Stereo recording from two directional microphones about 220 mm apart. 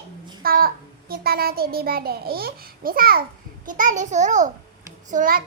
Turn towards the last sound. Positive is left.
turn(degrees=-40)  # may be behind; listen again after turning